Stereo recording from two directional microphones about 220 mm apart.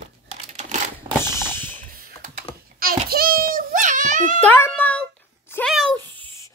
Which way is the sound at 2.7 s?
40° right (ahead or behind).